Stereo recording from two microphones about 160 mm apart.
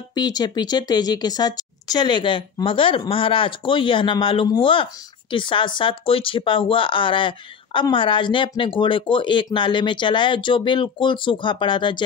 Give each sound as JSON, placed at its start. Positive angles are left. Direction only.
{"t": 0.1, "sound": "speech", "side_deg": 25}